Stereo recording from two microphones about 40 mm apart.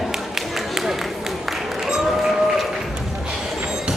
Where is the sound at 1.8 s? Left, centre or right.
Centre.